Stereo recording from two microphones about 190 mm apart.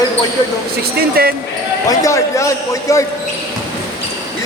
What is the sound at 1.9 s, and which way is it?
Speech, 15° left (ahead or behind).